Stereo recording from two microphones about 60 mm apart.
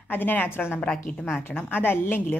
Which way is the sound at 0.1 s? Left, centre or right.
Left.